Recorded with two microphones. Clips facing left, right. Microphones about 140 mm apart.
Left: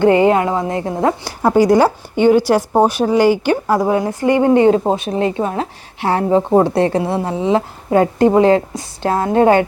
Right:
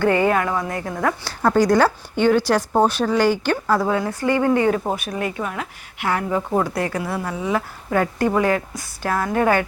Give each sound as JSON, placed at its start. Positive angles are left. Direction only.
{"t": 0.0, "sound": "speech", "side_deg": 20}